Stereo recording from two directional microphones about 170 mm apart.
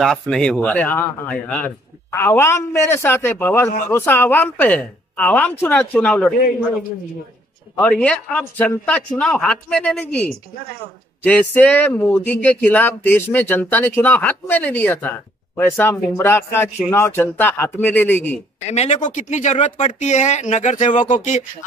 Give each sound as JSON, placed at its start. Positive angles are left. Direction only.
{"t": 0.0, "sound": "speech", "side_deg": 0}
{"t": 7.7, "sound": "speech", "side_deg": 5}
{"t": 18.7, "sound": "speech", "side_deg": 40}